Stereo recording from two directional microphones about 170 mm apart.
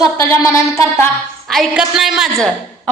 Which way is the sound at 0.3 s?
15° left (ahead or behind).